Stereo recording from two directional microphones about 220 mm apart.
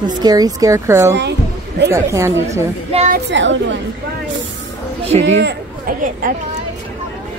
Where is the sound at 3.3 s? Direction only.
55° right (ahead or behind).